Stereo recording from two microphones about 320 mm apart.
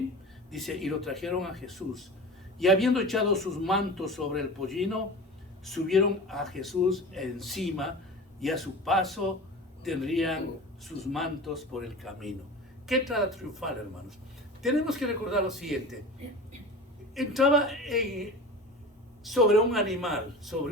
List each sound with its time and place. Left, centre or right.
0.5 s speech: centre
17.2 s speech: centre
19.2 s speech: centre